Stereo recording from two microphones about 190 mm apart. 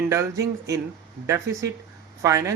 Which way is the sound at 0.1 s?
15° right (ahead or behind).